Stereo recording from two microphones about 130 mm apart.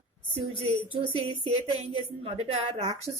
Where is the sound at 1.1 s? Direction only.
45° right (ahead or behind).